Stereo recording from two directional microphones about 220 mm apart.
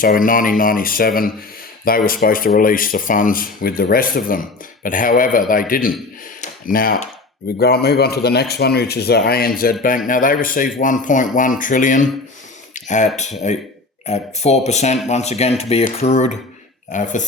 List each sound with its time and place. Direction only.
0.0 s speech: 40° left (ahead or behind)
12.7 s a sound: 35° left (ahead or behind)
13.5 s speech: 30° left (ahead or behind)